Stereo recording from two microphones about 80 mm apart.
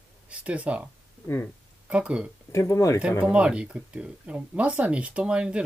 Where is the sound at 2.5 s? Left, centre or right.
Left.